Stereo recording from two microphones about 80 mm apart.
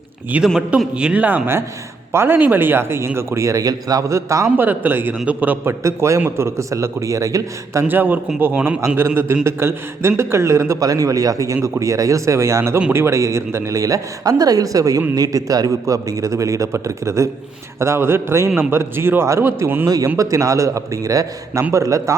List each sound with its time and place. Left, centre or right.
0.3 s a man's voice: centre; by 4.5 s right
4.5 s a man's voice: right
5.8 s a man's voice: right
7.9 s a man's voice: right
10.8 s a man's voice: right